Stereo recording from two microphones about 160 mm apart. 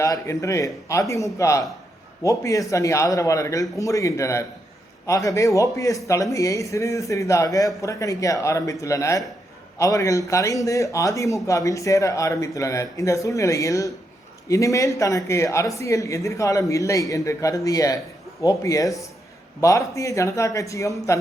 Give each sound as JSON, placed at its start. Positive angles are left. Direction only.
{"t": 0.0, "sound": "a man's voice", "side_deg": 20}